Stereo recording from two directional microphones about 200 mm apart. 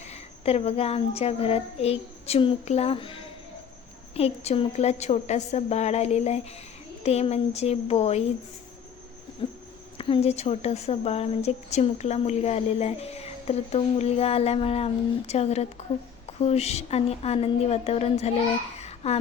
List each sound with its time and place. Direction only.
0.0 s a woman's voice: 30° left (ahead or behind)
10.0 s a woman's voice: 30° left (ahead or behind)
18.8 s a sound: 30° left (ahead or behind)